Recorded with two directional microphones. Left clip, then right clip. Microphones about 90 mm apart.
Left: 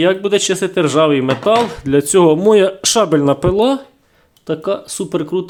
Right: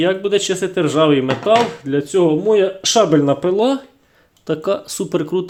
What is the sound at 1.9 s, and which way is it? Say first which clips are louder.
Speech: left 5 dB; 70° left (ahead or behind).